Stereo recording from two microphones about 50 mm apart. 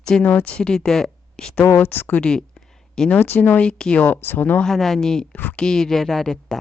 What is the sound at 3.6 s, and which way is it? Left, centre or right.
Speech, centre.